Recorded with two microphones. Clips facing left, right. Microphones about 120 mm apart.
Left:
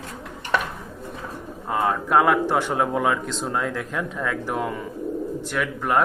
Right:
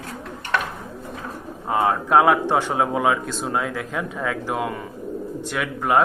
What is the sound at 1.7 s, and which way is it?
A man's voice, 15° right (ahead or behind).